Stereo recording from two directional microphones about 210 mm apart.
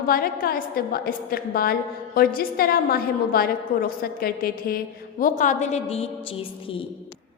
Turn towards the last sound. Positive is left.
turn(degrees=25)  # may be behind; listen again after turning